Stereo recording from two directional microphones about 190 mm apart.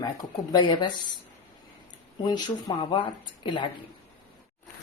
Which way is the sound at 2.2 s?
20° left (ahead or behind).